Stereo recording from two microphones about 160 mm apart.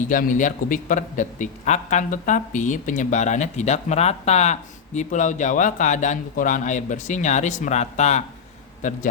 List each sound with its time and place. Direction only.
0.0 s a man's voice: 55° left (ahead or behind)